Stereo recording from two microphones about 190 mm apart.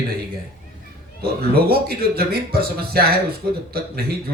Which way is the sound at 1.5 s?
55° right (ahead or behind).